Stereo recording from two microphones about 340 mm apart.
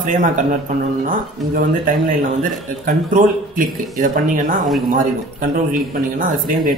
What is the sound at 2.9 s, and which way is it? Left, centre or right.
Speech, right.